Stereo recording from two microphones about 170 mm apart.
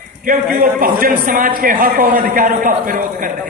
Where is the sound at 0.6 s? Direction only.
55° right (ahead or behind).